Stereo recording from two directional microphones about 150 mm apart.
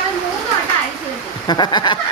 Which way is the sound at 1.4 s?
30° left (ahead or behind).